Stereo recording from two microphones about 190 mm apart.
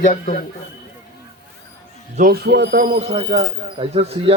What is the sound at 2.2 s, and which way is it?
Speech, 55° right (ahead or behind).